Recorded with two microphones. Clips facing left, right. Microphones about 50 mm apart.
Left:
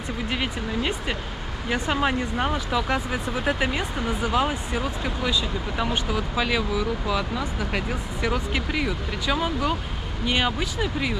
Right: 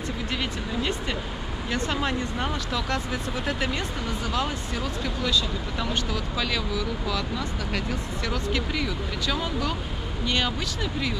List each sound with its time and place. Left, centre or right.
0.3 s speech: centre